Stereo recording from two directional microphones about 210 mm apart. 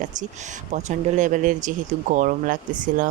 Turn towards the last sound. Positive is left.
turn(degrees=-40)  # may be behind; listen again after turning